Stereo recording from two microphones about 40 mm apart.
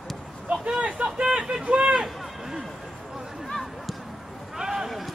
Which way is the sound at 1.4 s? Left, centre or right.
Centre.